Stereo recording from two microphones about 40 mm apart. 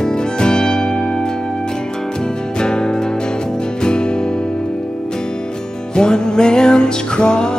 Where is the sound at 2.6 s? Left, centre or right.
Left.